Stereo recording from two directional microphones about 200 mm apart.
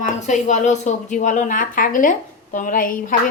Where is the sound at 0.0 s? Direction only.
35° left (ahead or behind).